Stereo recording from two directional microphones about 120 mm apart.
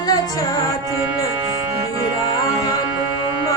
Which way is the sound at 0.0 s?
30° left (ahead or behind).